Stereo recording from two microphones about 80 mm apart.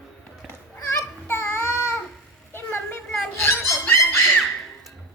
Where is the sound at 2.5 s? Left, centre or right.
Left.